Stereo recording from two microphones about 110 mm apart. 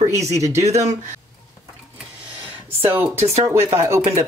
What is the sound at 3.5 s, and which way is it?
Speech, 25° right (ahead or behind).